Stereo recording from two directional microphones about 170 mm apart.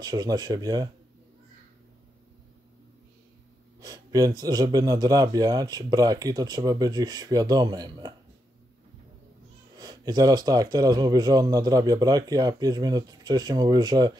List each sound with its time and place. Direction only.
0.0 s a man's voice: 20° right (ahead or behind)
3.8 s a man's voice: 20° right (ahead or behind)
9.8 s a man's voice: 25° right (ahead or behind)